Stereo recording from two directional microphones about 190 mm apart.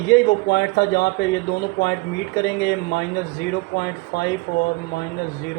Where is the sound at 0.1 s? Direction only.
60° left (ahead or behind).